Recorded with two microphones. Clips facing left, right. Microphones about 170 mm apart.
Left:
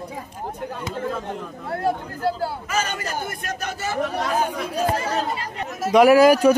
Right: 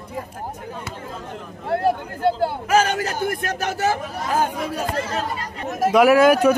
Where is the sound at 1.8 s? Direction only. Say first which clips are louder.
Right 2 dB; 25° right (ahead or behind).